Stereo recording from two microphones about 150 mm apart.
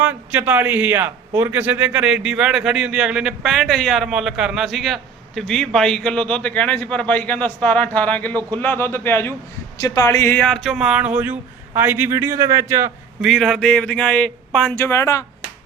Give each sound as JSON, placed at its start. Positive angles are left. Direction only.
{"t": 0.0, "sound": "a man's voice", "side_deg": -10}
{"t": 13.2, "sound": "speech", "side_deg": 0}
{"t": 14.7, "sound": "a man's voice", "side_deg": 15}